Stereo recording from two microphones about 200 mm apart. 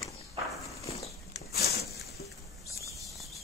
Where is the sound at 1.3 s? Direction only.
55° left (ahead or behind).